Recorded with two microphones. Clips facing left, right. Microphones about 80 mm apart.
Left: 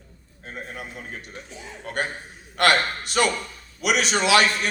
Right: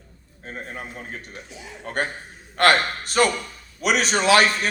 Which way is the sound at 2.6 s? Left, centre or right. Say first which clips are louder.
Right 2 dB; right.